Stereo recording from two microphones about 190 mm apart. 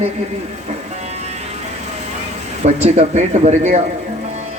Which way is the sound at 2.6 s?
35° right (ahead or behind).